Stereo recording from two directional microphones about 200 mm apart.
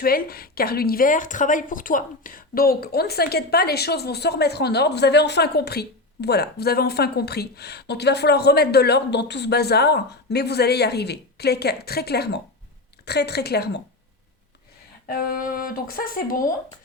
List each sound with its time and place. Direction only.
0.0 s a woman's voice: 50° left (ahead or behind)
15.0 s a woman's voice: 45° left (ahead or behind)